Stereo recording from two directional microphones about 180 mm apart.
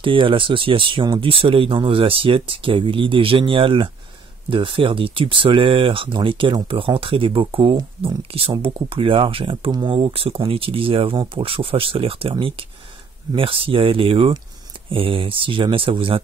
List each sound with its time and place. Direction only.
0.0 s speech: 30° right (ahead or behind)